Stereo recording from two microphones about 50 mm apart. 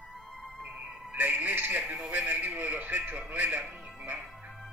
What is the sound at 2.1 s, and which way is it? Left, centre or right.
Speech, right.